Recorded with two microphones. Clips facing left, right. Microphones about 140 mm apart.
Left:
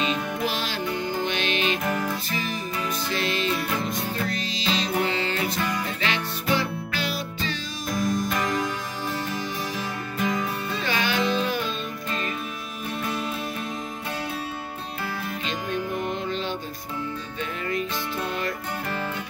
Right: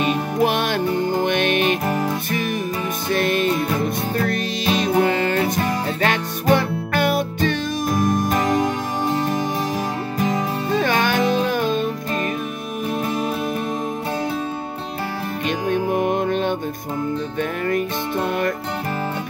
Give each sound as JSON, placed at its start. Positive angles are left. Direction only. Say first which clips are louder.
{"t": 0.0, "sound": "music", "louder": "right 7 dB", "side_deg": -55}
{"t": 3.1, "sound": "music", "louder": "right 9 dB", "side_deg": -50}
{"t": 10.1, "sound": "music", "louder": "right 4 dB", "side_deg": -40}
{"t": 15.7, "sound": "music", "louder": "right 9 dB", "side_deg": -55}